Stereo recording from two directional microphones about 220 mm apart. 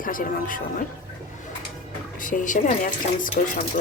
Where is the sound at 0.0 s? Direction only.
40° left (ahead or behind).